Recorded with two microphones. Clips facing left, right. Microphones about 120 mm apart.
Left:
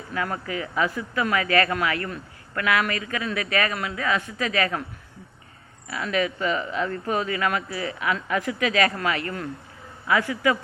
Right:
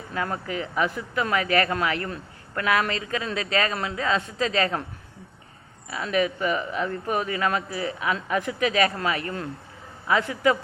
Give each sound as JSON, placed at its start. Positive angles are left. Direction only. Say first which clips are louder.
{"t": 0.1, "sound": "a man's voice", "louder": "even", "side_deg": -20}
{"t": 5.9, "sound": "a man's voice", "louder": "right 1 dB", "side_deg": -20}